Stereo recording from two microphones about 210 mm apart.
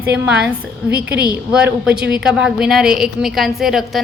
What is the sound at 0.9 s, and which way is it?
Speech, 50° right (ahead or behind).